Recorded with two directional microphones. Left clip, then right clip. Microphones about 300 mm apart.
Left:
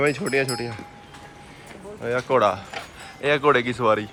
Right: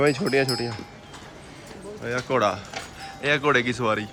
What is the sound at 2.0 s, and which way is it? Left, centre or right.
Speech, centre.